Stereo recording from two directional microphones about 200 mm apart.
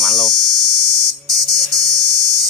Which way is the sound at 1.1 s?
Centre (ahead or behind).